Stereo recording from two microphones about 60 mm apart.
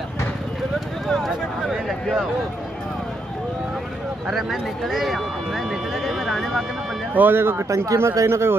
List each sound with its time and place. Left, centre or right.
1.0 s speech: centre
4.3 s speech: centre
7.2 s speech: right
7.7 s speech: right